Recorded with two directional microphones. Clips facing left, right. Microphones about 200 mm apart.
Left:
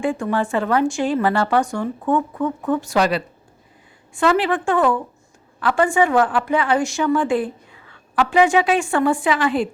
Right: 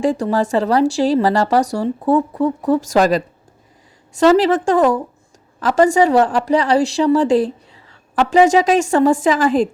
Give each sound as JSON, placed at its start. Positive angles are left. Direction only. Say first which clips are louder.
{"t": 0.0, "sound": "a woman's voice", "louder": "right 4 dB", "side_deg": -40}